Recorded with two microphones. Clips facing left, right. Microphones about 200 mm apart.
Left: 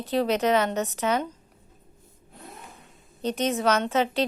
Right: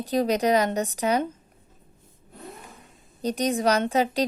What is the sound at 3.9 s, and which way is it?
Speech, 40° right (ahead or behind).